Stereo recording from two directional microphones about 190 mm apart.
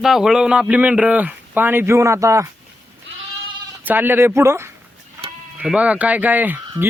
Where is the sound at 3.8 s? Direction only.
10° right (ahead or behind).